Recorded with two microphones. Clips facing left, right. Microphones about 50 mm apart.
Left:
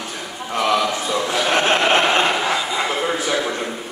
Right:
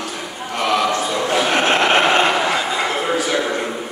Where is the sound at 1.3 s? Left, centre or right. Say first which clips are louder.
Right 2 dB; centre.